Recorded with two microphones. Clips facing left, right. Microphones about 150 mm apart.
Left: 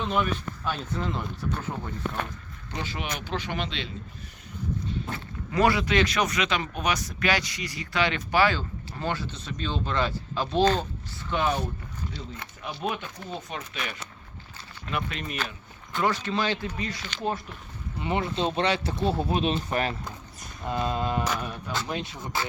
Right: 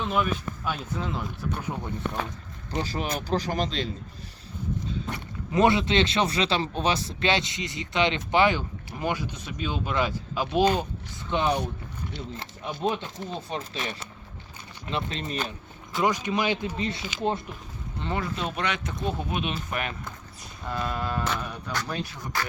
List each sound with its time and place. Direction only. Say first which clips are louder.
0.0 s speech: even; 5° right (ahead or behind)
1.5 s speech: even; 15° right (ahead or behind)
2.8 s speech: right 1 dB; 40° right (ahead or behind)
5.1 s speech: right 2 dB; 20° right (ahead or behind)
12.8 s speech: right 4 dB; 25° right (ahead or behind)
16.0 s speech: right 1 dB; 15° right (ahead or behind)
18.0 s speech: left 3 dB; 20° left (ahead or behind)
20.7 s speech: left 3 dB; 20° left (ahead or behind)